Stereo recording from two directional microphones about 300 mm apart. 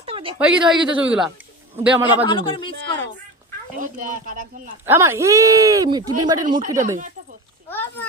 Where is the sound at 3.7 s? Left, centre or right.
Right.